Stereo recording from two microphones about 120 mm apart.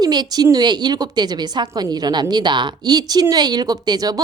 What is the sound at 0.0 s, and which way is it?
A woman's voice, 35° right (ahead or behind).